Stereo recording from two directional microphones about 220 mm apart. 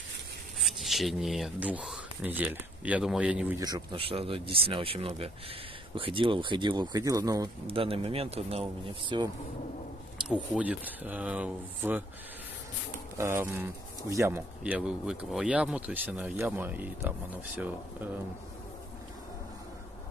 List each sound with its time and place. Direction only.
0.6 s speech: centre (ahead or behind)
3.5 s speech: 20° right (ahead or behind)
10.2 s speech: 5° right (ahead or behind)
13.2 s speech: 10° right (ahead or behind)